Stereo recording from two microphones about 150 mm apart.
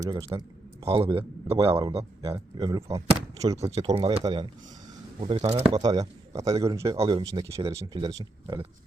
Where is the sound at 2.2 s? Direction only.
25° right (ahead or behind).